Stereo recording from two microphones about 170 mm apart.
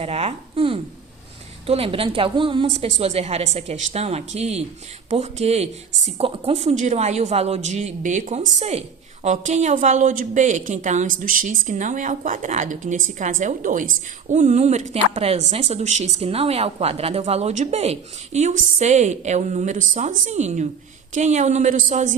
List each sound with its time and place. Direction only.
0.0 s a woman's voice: 35° right (ahead or behind)